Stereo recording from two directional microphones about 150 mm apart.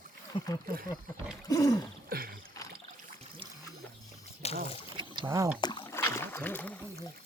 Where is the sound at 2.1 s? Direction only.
85° right.